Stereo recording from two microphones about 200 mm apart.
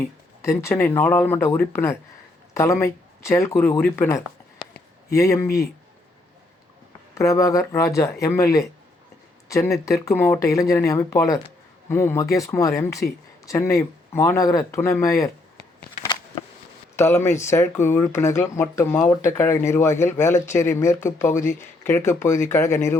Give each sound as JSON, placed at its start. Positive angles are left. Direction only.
{"t": 0.4, "sound": "speech", "side_deg": 15}
{"t": 7.1, "sound": "speech", "side_deg": 15}
{"t": 17.0, "sound": "speech", "side_deg": 15}